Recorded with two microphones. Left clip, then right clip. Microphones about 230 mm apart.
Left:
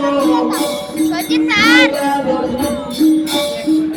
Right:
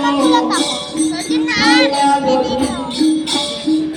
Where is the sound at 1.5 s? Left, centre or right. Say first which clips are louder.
Left 2 dB; left.